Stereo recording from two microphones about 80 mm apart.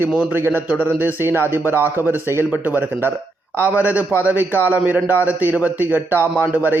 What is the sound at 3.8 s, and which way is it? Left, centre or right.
Speech, centre.